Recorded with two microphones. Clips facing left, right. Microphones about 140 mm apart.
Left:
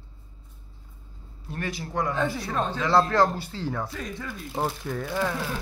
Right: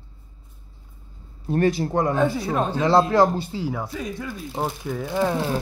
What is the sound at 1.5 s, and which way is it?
Speech, 30° right (ahead or behind).